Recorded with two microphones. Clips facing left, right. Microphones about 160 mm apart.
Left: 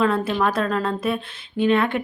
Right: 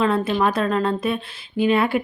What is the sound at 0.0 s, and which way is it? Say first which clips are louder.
A woman's voice: right 1 dB; centre (ahead or behind).